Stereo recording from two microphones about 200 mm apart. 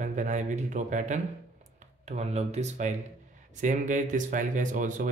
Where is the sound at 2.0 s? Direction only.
35° right (ahead or behind).